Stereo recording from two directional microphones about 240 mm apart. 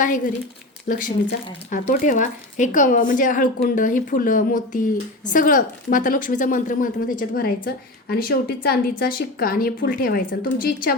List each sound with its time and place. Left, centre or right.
0.0 s speech: left